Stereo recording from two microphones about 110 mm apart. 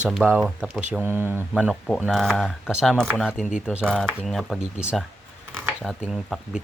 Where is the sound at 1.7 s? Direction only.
Centre (ahead or behind).